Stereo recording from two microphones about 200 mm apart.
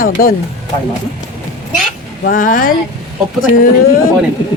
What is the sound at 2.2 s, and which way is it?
Speech, 40° left (ahead or behind).